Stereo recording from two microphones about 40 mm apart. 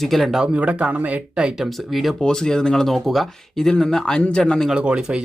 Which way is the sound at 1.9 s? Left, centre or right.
Centre.